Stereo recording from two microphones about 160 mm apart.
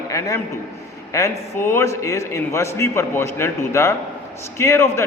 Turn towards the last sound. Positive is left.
turn(degrees=20)  # may be behind; listen again after turning